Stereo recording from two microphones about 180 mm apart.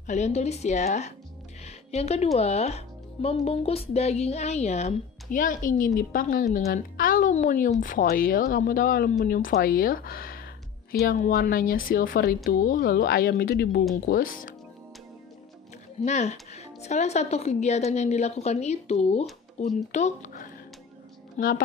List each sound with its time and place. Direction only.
0.0 s speech: 40° left (ahead or behind)
1.6 s music: 35° left (ahead or behind)
2.3 s a woman's voice: 35° left (ahead or behind)
16.0 s a woman's voice: 40° left (ahead or behind)